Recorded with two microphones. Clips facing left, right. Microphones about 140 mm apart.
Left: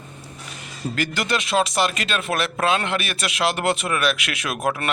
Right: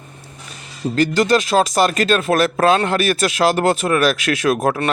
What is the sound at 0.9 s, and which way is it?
Speech, 35° right (ahead or behind).